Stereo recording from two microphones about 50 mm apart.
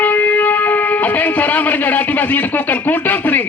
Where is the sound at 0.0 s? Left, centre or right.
Left.